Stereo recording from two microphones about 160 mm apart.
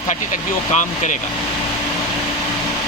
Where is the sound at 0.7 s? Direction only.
50° left (ahead or behind).